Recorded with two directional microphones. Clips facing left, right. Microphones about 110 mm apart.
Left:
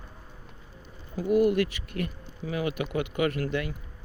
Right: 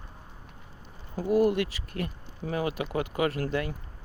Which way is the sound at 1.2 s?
30° right (ahead or behind).